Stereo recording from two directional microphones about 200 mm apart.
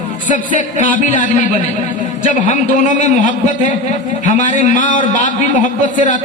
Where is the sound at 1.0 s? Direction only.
40° left (ahead or behind).